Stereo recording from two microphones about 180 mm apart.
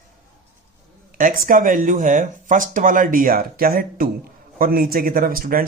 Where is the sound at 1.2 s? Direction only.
50° right (ahead or behind).